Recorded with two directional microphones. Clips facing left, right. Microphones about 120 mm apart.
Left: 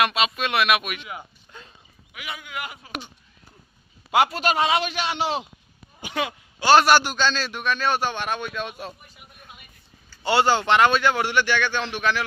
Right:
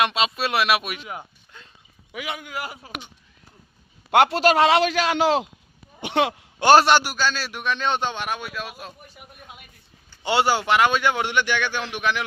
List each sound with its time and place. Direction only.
0.0 s speech: 25° right (ahead or behind)
2.4 s speech: 35° right (ahead or behind)
4.1 s a man's voice: 70° right (ahead or behind); by 5.5 s 90° right
6.0 s speech: 70° right (ahead or behind)
6.8 s speech: 15° right (ahead or behind)
10.2 s speech: 15° right (ahead or behind)